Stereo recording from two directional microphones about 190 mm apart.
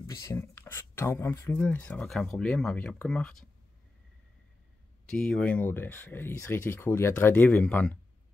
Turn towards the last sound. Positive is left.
turn(degrees=10)  # may be behind; listen again after turning